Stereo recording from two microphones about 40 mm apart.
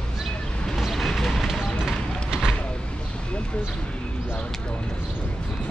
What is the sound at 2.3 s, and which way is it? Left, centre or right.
Vehicle, right.